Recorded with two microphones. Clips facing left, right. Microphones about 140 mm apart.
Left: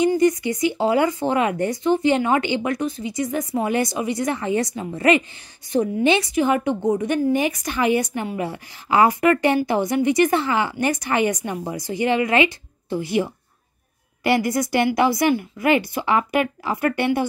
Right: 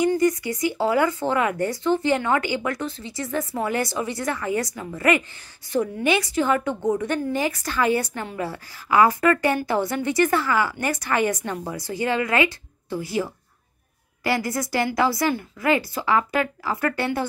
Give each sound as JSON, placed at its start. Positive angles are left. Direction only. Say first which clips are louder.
{"t": 0.2, "sound": "speech", "louder": "left 3 dB", "side_deg": 20}